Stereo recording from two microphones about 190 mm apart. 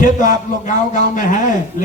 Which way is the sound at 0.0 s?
40° left (ahead or behind).